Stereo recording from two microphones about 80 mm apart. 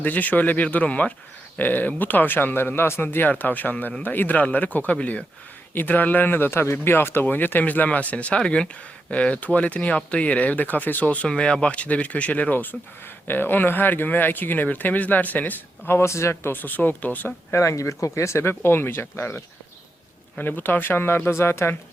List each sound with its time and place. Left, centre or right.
0.0 s speech: centre
17.6 s speech: left
20.4 s speech: left